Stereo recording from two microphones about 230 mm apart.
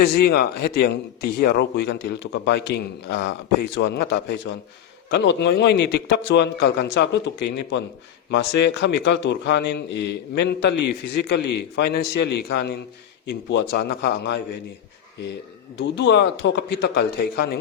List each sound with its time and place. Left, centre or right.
0.0 s speech: left
15.8 s speech: left